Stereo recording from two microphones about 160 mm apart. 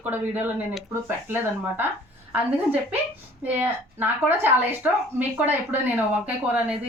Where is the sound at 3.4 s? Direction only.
10° right (ahead or behind).